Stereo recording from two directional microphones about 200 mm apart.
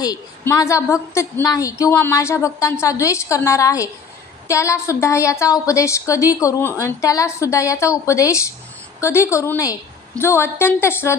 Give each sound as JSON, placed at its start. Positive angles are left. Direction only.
{"t": 0.0, "sound": "a woman's voice", "side_deg": 15}